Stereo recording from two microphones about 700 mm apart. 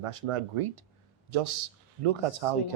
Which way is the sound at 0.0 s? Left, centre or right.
Right.